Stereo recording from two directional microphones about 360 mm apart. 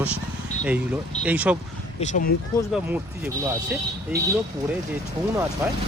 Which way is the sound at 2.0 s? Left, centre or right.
Left.